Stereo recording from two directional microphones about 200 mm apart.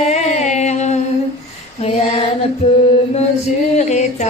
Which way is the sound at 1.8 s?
30° left (ahead or behind).